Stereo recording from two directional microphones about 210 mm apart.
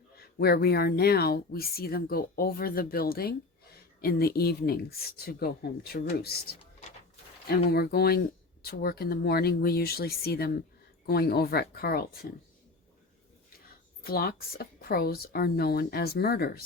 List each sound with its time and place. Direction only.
0.2 s speech: 45° left (ahead or behind)
7.4 s speech: 50° left (ahead or behind)
14.0 s speech: 45° left (ahead or behind)